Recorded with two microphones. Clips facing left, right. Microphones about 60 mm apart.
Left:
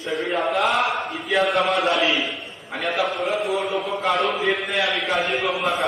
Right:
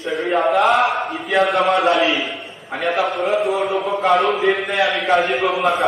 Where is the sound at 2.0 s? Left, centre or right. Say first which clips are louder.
Right 2 dB; centre.